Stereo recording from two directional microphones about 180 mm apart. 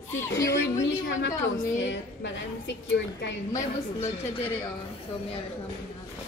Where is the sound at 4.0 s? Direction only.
30° left (ahead or behind).